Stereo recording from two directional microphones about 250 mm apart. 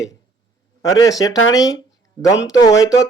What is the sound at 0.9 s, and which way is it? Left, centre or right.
Speech, centre.